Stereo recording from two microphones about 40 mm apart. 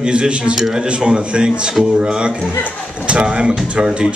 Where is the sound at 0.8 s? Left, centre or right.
Right.